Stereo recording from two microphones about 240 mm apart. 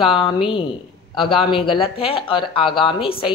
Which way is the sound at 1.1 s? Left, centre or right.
Left.